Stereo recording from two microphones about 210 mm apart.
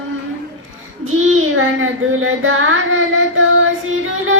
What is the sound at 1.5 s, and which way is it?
Child singing, 75° right (ahead or behind).